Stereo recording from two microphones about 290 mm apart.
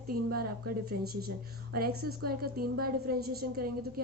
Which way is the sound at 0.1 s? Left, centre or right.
Right.